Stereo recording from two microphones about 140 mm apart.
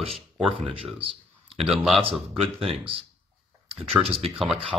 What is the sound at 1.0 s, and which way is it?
Speech, 40° right (ahead or behind).